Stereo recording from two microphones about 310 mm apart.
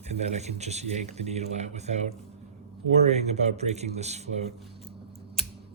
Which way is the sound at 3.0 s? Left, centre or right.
Right.